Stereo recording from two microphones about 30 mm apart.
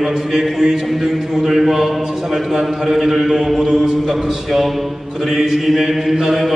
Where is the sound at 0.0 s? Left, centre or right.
Centre.